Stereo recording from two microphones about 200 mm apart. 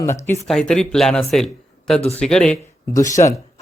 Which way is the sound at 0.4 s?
5° left (ahead or behind).